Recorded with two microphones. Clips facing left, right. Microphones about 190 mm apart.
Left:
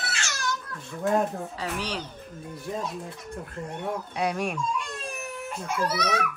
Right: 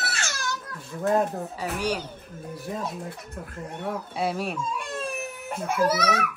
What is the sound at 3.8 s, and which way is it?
Speech, 5° right (ahead or behind).